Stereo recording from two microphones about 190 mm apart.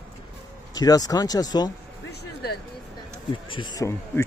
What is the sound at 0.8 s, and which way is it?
Speech, 20° left (ahead or behind).